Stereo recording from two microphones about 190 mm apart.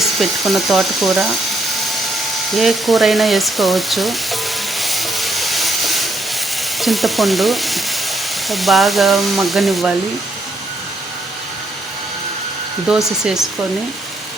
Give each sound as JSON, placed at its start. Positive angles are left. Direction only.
{"t": 0.0, "sound": "frying", "side_deg": 0}
{"t": 2.5, "sound": "frying", "side_deg": 0}
{"t": 4.8, "sound": "steam", "side_deg": 0}
{"t": 6.7, "sound": "frying", "side_deg": 0}
{"t": 12.9, "sound": "frying", "side_deg": -5}